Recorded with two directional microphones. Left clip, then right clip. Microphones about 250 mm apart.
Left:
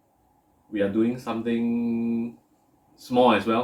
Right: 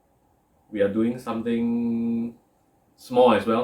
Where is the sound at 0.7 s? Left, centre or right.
Centre.